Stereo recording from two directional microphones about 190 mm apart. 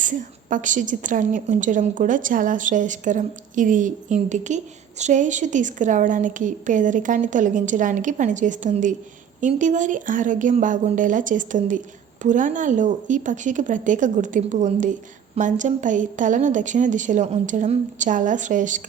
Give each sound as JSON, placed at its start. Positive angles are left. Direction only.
{"t": 0.0, "sound": "a woman's voice", "side_deg": -40}